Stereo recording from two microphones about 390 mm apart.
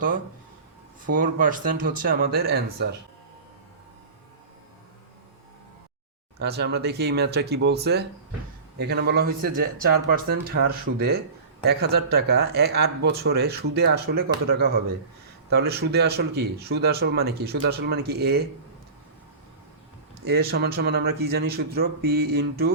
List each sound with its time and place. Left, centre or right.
1.0 s speech: right
6.4 s speech: right
10.5 s speech: right
20.2 s speech: right